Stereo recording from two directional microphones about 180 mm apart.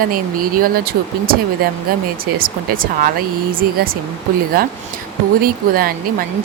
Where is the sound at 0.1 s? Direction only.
50° right (ahead or behind).